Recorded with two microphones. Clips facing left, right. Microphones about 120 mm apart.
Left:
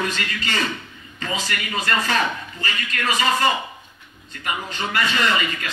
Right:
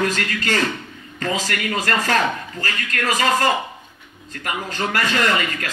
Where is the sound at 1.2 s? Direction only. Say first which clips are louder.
Right 4 dB; 75° right (ahead or behind).